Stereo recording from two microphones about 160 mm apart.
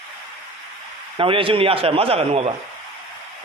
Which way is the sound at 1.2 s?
35° right (ahead or behind).